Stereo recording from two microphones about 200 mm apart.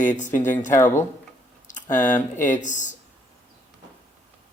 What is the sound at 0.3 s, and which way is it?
Speech, 40° left (ahead or behind).